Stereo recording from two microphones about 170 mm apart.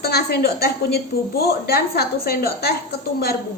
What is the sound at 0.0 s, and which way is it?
A woman's voice, 70° left (ahead or behind).